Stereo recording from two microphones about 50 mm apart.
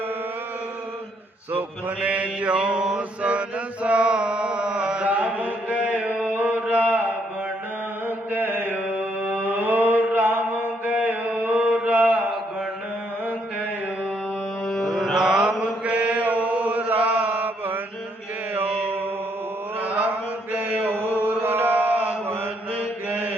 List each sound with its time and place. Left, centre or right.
1.5 s mantra: right
5.0 s chant: right
6.3 s mantra: right
8.0 s mantra: right
14.7 s mantra: centre
14.9 s mantra: centre; by 17.7 s right
19.8 s chant: right
20.5 s mantra: right